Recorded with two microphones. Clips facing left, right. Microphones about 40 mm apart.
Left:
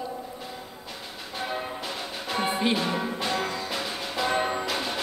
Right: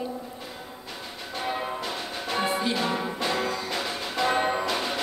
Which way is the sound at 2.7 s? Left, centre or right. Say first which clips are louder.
Even; centre.